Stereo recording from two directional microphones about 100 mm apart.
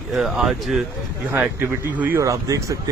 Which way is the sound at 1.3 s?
20° right (ahead or behind).